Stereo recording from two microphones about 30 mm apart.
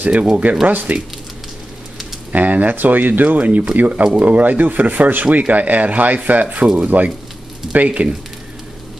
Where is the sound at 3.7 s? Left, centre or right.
Right.